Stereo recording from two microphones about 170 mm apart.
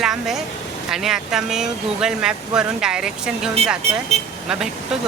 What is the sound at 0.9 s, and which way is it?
A woman's voice, 5° right (ahead or behind).